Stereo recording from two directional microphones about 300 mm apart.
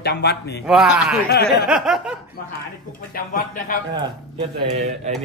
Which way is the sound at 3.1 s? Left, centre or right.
Left.